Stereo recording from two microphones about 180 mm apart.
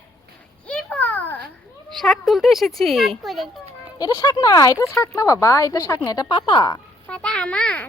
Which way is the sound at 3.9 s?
20° left (ahead or behind).